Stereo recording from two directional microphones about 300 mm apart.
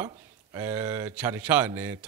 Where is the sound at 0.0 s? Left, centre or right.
Centre.